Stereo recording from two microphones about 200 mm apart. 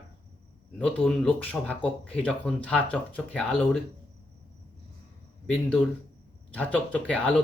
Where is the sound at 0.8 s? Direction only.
5° left (ahead or behind).